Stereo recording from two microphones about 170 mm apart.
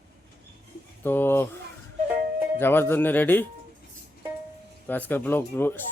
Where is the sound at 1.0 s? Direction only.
10° left (ahead or behind).